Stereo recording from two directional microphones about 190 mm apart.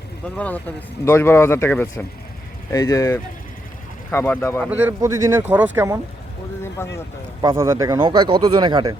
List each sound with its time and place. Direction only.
0.3 s speech: 10° left (ahead or behind)
4.6 s speech: 10° right (ahead or behind)
6.8 s speech: 10° left (ahead or behind)
7.4 s speech: 15° right (ahead or behind)